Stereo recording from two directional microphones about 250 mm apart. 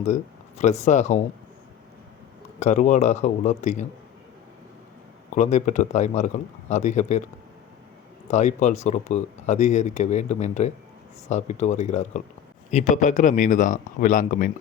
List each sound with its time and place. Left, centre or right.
0.0 s speech: left
2.6 s speech: left
5.3 s speech: left
8.3 s a man's voice: left